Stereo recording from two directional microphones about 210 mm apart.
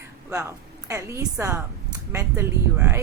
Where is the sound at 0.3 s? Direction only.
15° right (ahead or behind).